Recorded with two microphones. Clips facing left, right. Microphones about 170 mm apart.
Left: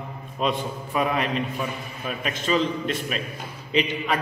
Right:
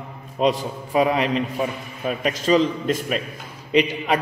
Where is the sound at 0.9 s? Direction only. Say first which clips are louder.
Right 5 dB; 30° right (ahead or behind).